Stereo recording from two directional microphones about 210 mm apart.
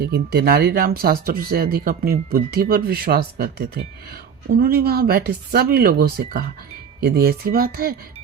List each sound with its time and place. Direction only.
0.0 s speech: 50° right (ahead or behind)